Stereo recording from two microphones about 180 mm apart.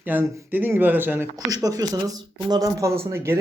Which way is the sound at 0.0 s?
10° right (ahead or behind).